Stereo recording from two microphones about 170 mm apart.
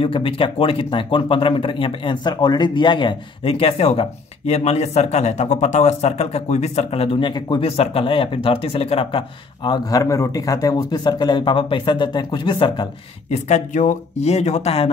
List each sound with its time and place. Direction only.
0.0 s a man's voice: 30° left (ahead or behind)
13.3 s a man's voice: 45° left (ahead or behind)